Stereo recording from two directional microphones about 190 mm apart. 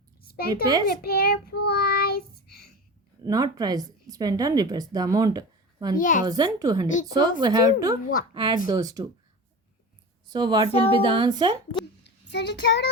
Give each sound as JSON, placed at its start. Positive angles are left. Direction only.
{"t": 0.3, "sound": "a sound", "side_deg": 55}
{"t": 0.9, "sound": "child singing", "side_deg": 55}
{"t": 3.2, "sound": "a woman's voice", "side_deg": -20}
{"t": 6.0, "sound": "a child's voice", "side_deg": 45}
{"t": 6.2, "sound": "a woman's voice", "side_deg": -20}
{"t": 10.2, "sound": "a woman's voice", "side_deg": -20}
{"t": 10.7, "sound": "speech", "side_deg": 30}
{"t": 10.9, "sound": "a woman's voice", "side_deg": -25}
{"t": 12.0, "sound": "a sound", "side_deg": 65}